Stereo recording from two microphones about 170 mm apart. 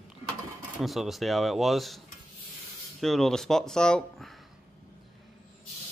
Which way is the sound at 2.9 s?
Centre (ahead or behind).